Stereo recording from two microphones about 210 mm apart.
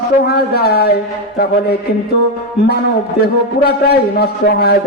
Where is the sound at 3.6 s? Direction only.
50° left (ahead or behind).